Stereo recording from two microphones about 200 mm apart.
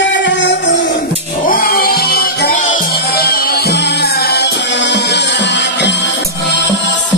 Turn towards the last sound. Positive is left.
turn(degrees=60)  # may be behind; listen again after turning